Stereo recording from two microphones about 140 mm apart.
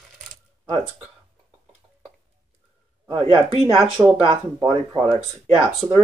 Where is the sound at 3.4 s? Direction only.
45° right (ahead or behind).